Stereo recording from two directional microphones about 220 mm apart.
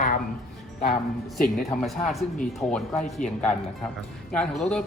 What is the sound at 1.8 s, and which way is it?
Speech, centre (ahead or behind).